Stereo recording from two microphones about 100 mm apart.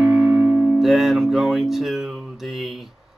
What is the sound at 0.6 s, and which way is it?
Music, centre (ahead or behind).